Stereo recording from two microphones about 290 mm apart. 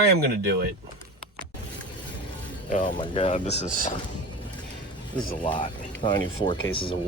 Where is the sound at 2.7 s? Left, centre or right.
Left.